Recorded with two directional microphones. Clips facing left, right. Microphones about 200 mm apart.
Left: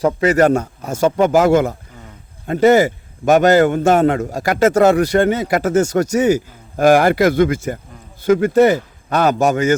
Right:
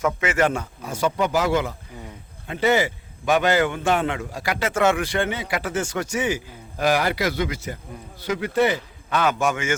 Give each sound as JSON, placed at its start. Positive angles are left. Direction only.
{"t": 0.0, "sound": "a man's voice", "side_deg": 35}